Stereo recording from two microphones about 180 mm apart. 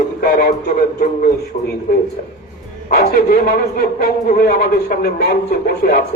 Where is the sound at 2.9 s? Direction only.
60° left (ahead or behind).